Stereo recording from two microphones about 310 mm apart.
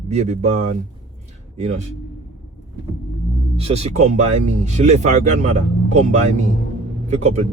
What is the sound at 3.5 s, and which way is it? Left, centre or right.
Speech, centre.